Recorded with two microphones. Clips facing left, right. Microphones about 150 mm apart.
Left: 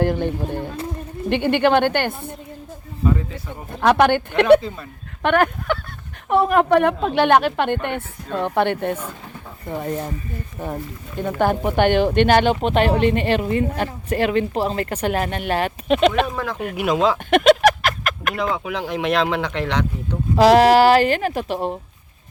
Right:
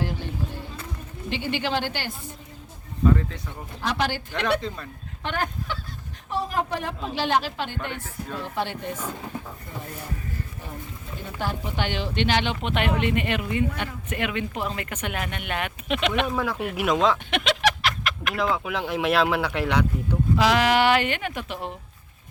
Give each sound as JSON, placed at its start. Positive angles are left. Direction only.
{"t": 0.0, "sound": "speech", "side_deg": 55}
{"t": 3.0, "sound": "speech", "side_deg": 10}
{"t": 3.7, "sound": "speech", "side_deg": 60}
{"t": 4.6, "sound": "speech", "side_deg": 5}
{"t": 5.2, "sound": "speech", "side_deg": 65}
{"t": 10.6, "sound": "speech", "side_deg": 50}
{"t": 12.5, "sound": "speech", "side_deg": 35}
{"t": 16.2, "sound": "speech", "side_deg": -5}
{"t": 17.3, "sound": "a sound", "side_deg": 45}
{"t": 18.3, "sound": "speech", "side_deg": 0}
{"t": 20.3, "sound": "speech", "side_deg": 40}